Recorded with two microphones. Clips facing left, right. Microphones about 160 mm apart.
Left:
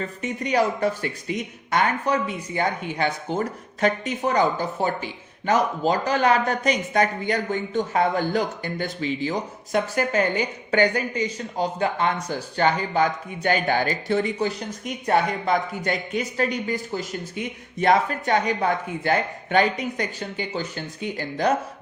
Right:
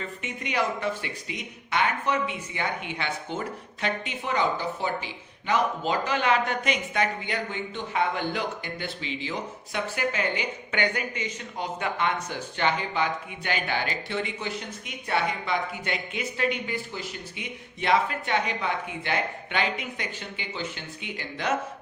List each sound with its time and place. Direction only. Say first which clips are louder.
0.0 s speech: left 6 dB; 40° left (ahead or behind)